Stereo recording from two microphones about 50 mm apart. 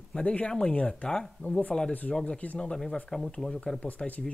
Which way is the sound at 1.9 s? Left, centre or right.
Left.